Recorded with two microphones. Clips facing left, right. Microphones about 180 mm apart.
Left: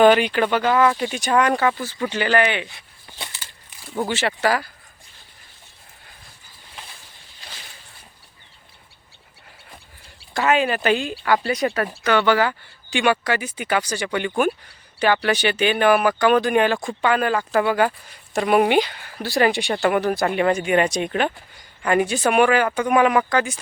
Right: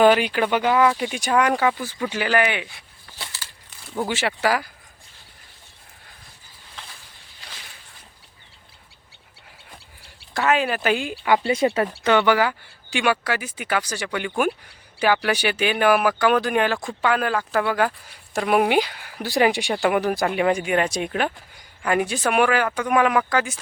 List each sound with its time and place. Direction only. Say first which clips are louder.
0.0 s speech: left 2 dB; 5° right (ahead or behind)
4.1 s speech: left 1 dB; 10° right (ahead or behind)
10.3 s speech: left 2 dB; centre (ahead or behind)
11.2 s speech: right 1 dB; 20° right (ahead or behind); by 23.6 s 5° right (ahead or behind)